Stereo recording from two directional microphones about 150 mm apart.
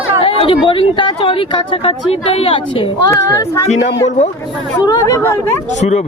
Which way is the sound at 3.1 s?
20° left (ahead or behind).